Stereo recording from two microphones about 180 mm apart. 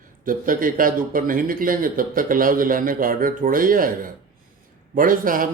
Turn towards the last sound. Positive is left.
turn(degrees=-50)  # may be behind; listen again after turning